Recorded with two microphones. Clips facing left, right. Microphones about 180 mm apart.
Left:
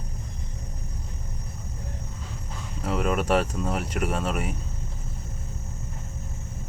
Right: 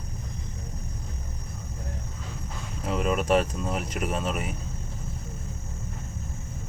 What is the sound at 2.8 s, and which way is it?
Speech, 5° left (ahead or behind).